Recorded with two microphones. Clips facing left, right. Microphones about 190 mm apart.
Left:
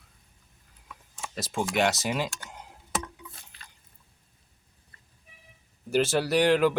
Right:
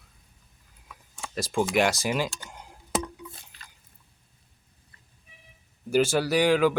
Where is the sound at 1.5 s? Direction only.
Centre (ahead or behind).